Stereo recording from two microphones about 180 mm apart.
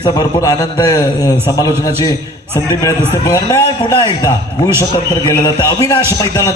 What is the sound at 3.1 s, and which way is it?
A man's voice, 15° left (ahead or behind).